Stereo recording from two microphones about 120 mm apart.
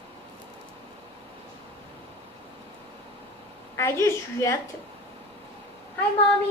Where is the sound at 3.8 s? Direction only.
25° left (ahead or behind).